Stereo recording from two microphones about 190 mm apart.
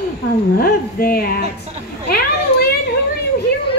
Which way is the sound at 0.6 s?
50° left (ahead or behind).